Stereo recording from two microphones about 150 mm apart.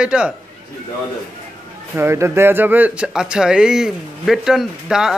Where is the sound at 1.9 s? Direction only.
15° right (ahead or behind).